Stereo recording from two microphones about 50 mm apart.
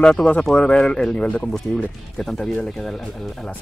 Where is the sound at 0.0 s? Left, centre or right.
Centre.